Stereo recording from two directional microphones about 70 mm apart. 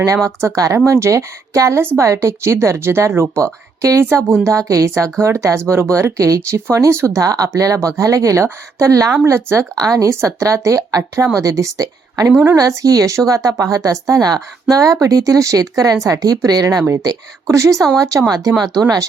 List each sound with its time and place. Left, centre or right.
0.0 s speech: right
1.8 s speech: right
6.7 s speech: right
7.2 s speech: right
8.4 s speech: right
9.7 s speech: right
10.1 s speech: right
17.5 s speech: right
18.3 s speech: right